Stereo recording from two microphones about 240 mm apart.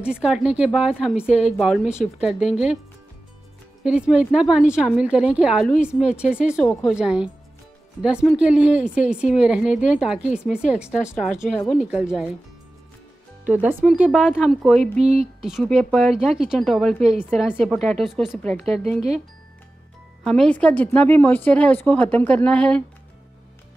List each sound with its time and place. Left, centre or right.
0.0 s speech: centre
3.8 s speech: centre
13.5 s speech: centre
18.7 s speech: right
20.2 s speech: centre